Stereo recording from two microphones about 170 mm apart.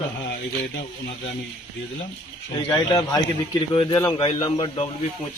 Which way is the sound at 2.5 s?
30° left (ahead or behind).